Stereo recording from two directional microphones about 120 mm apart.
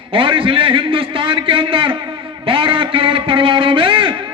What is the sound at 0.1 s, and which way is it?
A man's voice, 45° right (ahead or behind).